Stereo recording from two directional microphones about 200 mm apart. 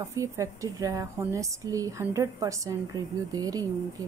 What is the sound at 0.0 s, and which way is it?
Speech, 15° right (ahead or behind).